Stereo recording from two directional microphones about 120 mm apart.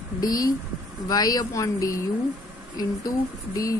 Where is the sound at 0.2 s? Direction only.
30° left (ahead or behind).